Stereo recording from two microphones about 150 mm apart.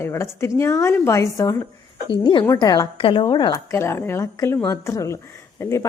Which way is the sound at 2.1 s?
35° left (ahead or behind).